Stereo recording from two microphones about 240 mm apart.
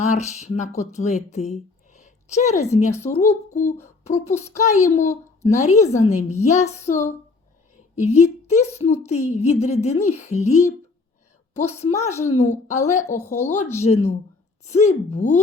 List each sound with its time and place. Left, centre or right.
0.0 s a woman's voice: left
2.9 s a woman's voice: centre
3.2 s a child's voice: left
13.1 s a woman's voice: centre
13.7 s speech: left